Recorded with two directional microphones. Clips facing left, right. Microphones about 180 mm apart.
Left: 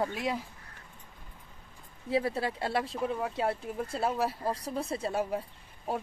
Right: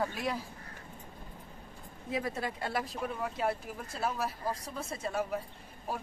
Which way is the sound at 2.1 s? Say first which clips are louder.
Left 5 dB; 30° left (ahead or behind).